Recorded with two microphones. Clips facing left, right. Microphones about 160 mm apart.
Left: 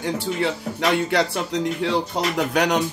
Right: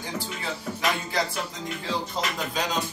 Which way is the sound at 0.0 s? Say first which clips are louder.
Left 10 dB; 70° left (ahead or behind).